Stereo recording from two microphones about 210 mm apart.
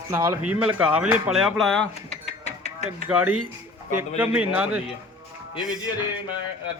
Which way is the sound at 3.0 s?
5° right (ahead or behind).